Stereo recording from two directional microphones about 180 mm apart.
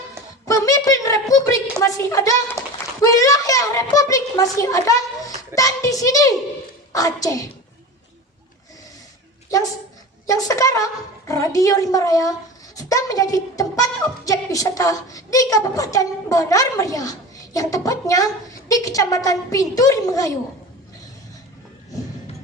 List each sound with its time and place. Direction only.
0.4 s a sound: 20° left (ahead or behind)
1.8 s a woman's voice: 15° left (ahead or behind)
10.2 s a woman's voice: 20° left (ahead or behind)